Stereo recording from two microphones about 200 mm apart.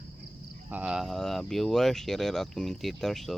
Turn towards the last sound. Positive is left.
turn(degrees=0)  # may be behind; listen again after turning